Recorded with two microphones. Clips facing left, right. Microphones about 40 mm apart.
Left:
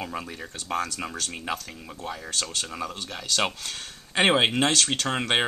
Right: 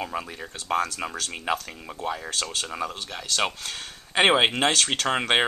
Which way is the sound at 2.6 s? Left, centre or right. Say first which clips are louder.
Right 2 dB; centre.